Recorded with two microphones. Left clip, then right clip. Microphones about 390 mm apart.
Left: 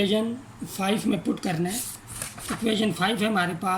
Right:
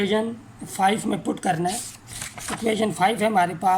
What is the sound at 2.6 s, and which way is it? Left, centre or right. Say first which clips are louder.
Speech: right 4 dB; centre.